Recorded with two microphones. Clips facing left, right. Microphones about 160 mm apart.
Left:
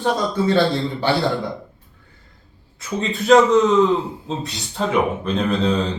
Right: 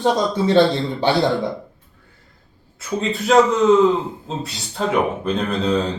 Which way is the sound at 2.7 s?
5° right (ahead or behind).